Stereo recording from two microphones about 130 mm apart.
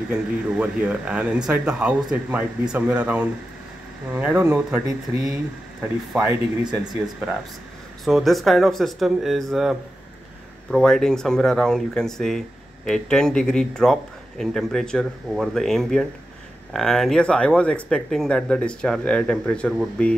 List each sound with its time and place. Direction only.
0.1 s a man's voice: 10° right (ahead or behind)
6.6 s speech: 30° right (ahead or behind)
8.0 s speech: centre (ahead or behind)